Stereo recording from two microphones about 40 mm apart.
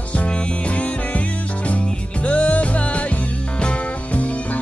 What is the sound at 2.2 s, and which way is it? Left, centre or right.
Music, left.